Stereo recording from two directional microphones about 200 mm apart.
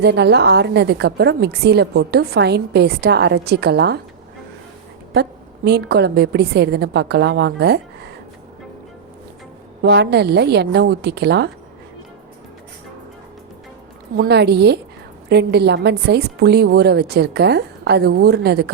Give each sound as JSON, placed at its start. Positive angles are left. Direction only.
{"t": 0.0, "sound": "a woman's voice", "side_deg": -55}
{"t": 5.1, "sound": "a woman's voice", "side_deg": -55}
{"t": 9.8, "sound": "a woman's voice", "side_deg": -55}
{"t": 14.2, "sound": "a woman's voice", "side_deg": -55}